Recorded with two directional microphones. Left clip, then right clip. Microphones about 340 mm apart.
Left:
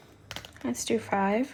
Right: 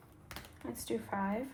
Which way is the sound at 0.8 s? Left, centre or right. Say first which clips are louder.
Left 10 dB; left.